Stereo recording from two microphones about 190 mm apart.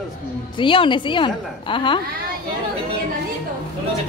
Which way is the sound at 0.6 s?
25° left (ahead or behind).